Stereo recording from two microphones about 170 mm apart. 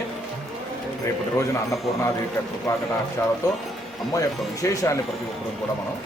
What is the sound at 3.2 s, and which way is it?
A man's voice, 15° left (ahead or behind).